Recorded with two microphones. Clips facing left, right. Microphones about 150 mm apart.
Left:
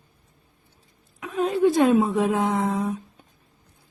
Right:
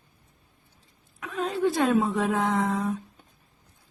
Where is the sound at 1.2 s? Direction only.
15° left (ahead or behind).